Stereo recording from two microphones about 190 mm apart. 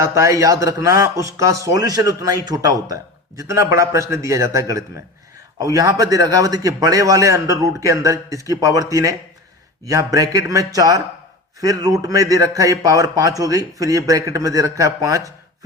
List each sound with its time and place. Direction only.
0.0 s speech: 15° right (ahead or behind)